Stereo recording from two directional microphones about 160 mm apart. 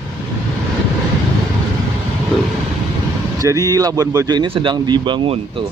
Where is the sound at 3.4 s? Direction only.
20° right (ahead or behind).